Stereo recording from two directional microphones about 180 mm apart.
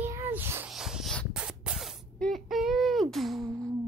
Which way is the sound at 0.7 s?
5° right (ahead or behind).